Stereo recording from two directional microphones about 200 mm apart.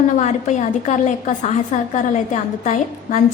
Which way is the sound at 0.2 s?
35° left (ahead or behind).